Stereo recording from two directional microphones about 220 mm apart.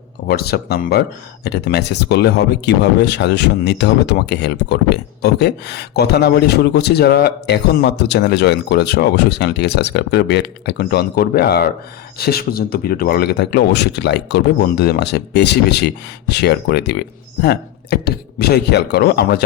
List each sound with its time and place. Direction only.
0.3 s speech: 45° left (ahead or behind)